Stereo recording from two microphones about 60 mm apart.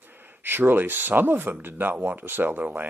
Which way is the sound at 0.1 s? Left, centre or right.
Right.